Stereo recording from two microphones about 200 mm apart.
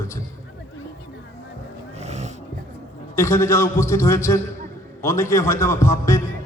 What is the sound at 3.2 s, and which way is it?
A man's voice, 15° left (ahead or behind).